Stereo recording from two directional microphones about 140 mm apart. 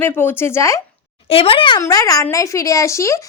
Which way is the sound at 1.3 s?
40° left (ahead or behind).